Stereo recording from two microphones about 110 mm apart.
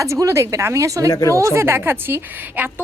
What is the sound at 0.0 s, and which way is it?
A woman's voice, 30° right (ahead or behind).